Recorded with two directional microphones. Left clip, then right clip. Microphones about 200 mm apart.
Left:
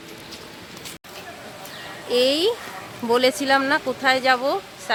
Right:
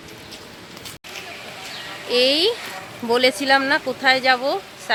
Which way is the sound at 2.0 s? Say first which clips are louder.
Right 2 dB; centre (ahead or behind).